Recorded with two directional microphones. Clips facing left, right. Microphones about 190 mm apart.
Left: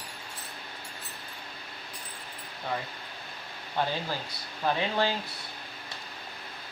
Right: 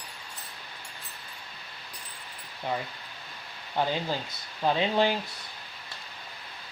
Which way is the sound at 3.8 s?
15° right (ahead or behind).